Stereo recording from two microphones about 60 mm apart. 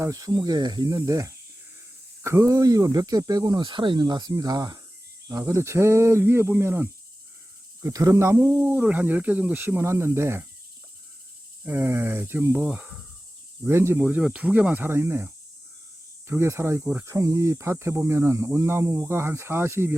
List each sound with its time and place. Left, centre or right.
0.1 s speech: right
2.2 s speech: right
5.5 s speech: right
7.8 s speech: right
8.1 s speech: right
8.4 s speech: right
9.6 s speech: right
9.8 s speech: right
11.6 s speech: right
12.5 s speech: right
13.7 s speech: right
14.3 s speech: right
14.8 s speech: right